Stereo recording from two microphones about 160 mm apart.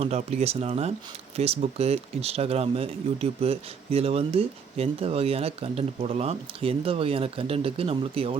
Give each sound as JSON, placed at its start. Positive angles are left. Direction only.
{"t": 0.0, "sound": "speech", "side_deg": -40}